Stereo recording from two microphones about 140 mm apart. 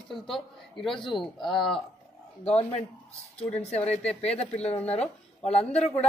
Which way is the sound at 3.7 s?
50° left (ahead or behind).